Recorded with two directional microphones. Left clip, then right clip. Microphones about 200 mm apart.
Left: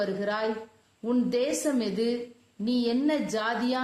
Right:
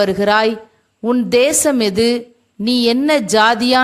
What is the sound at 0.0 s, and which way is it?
A woman's voice, 35° right (ahead or behind).